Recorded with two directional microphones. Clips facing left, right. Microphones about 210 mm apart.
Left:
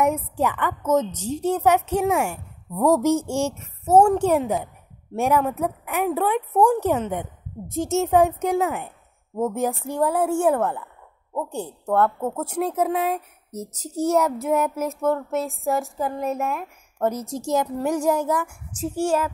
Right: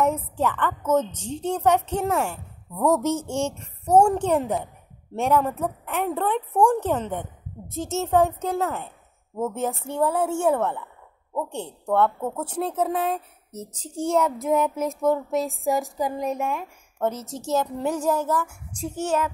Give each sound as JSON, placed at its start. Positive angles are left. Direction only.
{"t": 0.0, "sound": "a woman's voice", "side_deg": 10}
{"t": 11.4, "sound": "a woman's voice", "side_deg": -25}
{"t": 11.8, "sound": "a woman's voice", "side_deg": 5}